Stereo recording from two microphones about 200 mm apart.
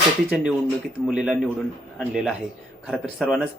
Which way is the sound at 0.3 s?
5° right (ahead or behind).